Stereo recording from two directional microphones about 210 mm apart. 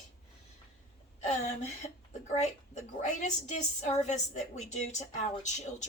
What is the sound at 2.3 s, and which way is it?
A woman's voice, 30° left (ahead or behind).